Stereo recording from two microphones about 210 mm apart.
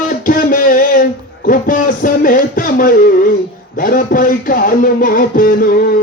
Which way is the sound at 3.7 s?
40° left (ahead or behind).